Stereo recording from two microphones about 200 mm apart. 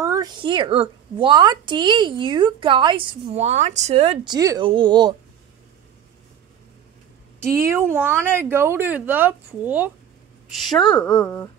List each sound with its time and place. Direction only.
0.0 s speech: 20° right (ahead or behind)
4.3 s speech: 20° right (ahead or behind)
7.3 s a woman's voice: 15° right (ahead or behind)
11.0 s speech: 20° left (ahead or behind)